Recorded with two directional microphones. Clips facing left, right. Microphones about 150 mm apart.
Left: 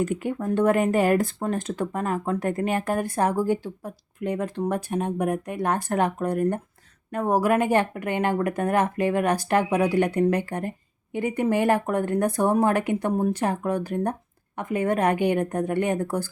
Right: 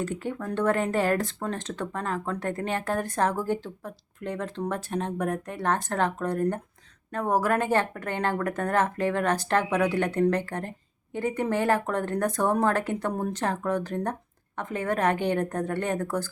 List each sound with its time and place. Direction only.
0.0 s speech: 15° left (ahead or behind)